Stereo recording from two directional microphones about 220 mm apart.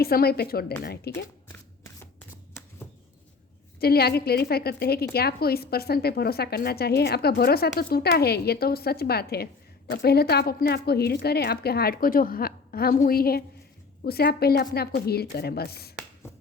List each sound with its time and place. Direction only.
0.0 s a woman's voice: 45° left (ahead or behind)
2.5 s shuffling cards: 10° left (ahead or behind)
3.8 s a woman's voice: 45° left (ahead or behind)